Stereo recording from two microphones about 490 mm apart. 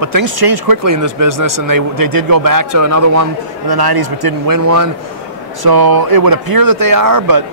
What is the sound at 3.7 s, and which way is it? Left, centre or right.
Speech, right.